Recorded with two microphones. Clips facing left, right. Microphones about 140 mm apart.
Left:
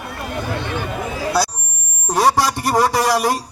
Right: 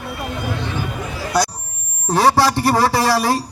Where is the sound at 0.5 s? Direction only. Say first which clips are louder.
Left 1 dB; 60° left (ahead or behind).